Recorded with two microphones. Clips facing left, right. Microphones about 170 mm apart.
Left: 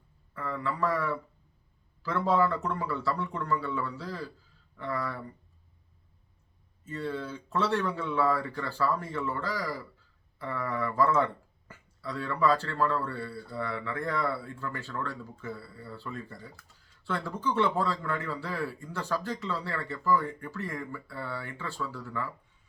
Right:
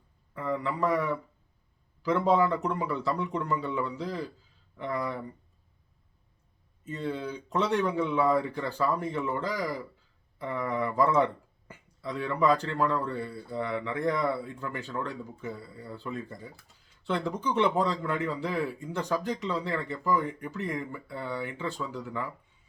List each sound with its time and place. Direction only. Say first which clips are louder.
0.3 s a man's voice: right 2 dB; 15° right (ahead or behind)
6.8 s speech: right 1 dB; 20° right (ahead or behind)